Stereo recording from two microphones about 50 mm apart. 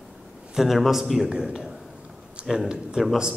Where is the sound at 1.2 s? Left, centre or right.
Centre.